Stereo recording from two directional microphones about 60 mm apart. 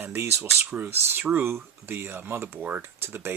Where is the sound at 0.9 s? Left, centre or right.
Right.